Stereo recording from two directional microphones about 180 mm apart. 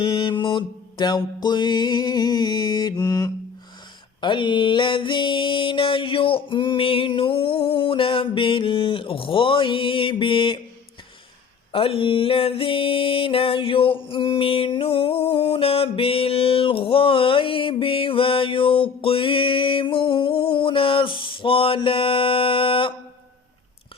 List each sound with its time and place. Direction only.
0.0 s music: 30° left (ahead or behind)
11.7 s music: 30° left (ahead or behind)